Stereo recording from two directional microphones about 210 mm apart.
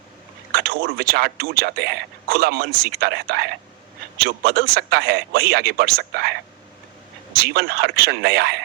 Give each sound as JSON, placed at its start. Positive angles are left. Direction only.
{"t": 0.5, "sound": "speech", "side_deg": -50}
{"t": 7.3, "sound": "speech", "side_deg": -50}